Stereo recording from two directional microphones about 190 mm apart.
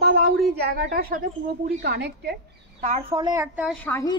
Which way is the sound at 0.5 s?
55° right (ahead or behind).